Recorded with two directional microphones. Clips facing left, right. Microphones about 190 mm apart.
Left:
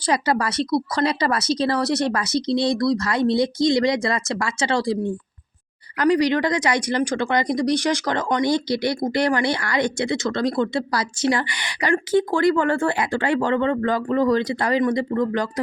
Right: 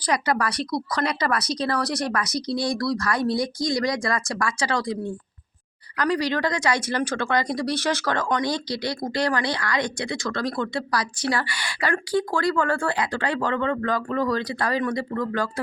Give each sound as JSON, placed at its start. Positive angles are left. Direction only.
{"t": 0.0, "sound": "speech", "side_deg": 25}
{"t": 6.0, "sound": "speech", "side_deg": 20}